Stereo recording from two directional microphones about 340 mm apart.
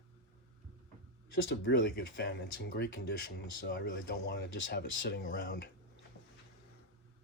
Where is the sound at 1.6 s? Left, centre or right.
Left.